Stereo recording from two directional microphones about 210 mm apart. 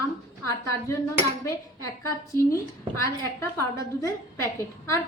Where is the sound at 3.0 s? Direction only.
15° left (ahead or behind).